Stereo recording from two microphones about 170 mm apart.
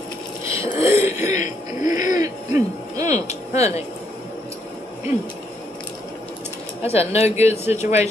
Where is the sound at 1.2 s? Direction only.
45° left (ahead or behind).